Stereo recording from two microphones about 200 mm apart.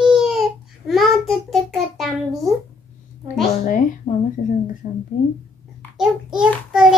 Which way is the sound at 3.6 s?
40° left (ahead or behind).